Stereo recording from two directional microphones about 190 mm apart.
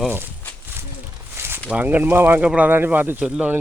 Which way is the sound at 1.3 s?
10° right (ahead or behind).